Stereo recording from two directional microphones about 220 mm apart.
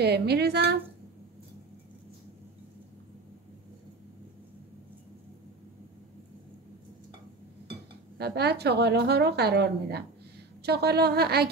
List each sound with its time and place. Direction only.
0.0 s speech: 50° right (ahead or behind)
8.2 s speech: 45° right (ahead or behind)